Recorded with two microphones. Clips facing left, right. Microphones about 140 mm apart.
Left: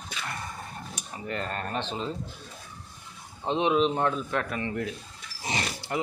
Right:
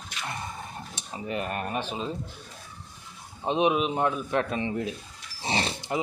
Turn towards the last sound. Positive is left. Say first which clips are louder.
# right 3 dB
turn(degrees=-30)  # may be behind; listen again after turning